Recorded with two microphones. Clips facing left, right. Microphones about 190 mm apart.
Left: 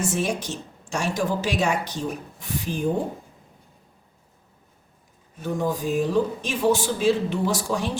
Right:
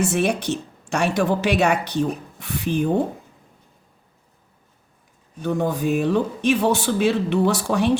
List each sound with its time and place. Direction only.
0.0 s speech: 65° right (ahead or behind)
5.4 s speech: 65° right (ahead or behind)